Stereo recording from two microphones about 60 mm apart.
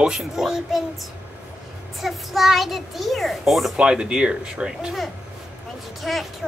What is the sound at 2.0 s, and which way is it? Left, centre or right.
A child's voice, centre.